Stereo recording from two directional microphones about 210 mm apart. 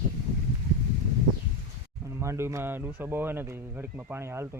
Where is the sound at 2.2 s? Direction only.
10° right (ahead or behind).